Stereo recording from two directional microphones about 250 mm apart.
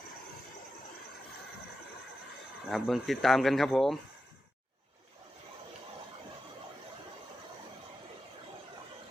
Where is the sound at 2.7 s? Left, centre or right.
Centre.